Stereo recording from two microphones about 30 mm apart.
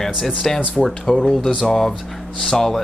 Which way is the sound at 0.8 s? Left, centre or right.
Centre.